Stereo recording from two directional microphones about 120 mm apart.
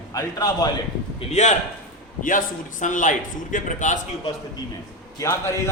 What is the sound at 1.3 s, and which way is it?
Speech, 75° left (ahead or behind).